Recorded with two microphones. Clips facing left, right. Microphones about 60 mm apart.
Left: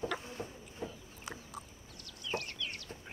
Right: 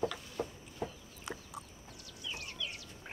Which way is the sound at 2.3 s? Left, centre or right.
Left.